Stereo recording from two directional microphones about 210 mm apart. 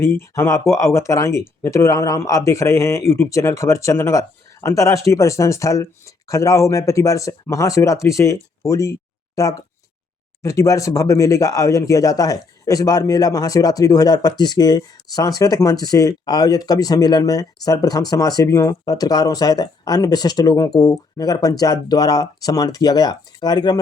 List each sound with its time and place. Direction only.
0.0 s speech: 10° left (ahead or behind)